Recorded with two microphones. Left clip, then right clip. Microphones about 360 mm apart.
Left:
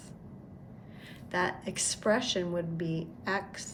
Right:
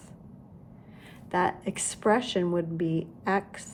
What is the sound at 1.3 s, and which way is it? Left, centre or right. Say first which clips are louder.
A woman's voice: right 4 dB; centre.